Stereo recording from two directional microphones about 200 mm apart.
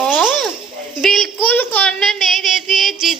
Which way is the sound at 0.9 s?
Centre (ahead or behind).